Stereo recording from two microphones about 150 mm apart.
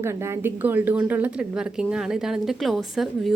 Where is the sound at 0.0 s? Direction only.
20° right (ahead or behind).